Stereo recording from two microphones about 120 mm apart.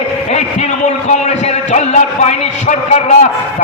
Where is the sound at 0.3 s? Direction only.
75° left (ahead or behind).